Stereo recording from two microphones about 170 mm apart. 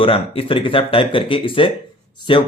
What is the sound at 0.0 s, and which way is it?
Speech, 35° left (ahead or behind).